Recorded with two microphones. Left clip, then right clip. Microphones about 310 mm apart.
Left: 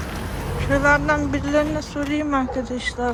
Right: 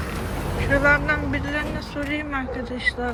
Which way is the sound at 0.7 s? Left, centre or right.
Centre.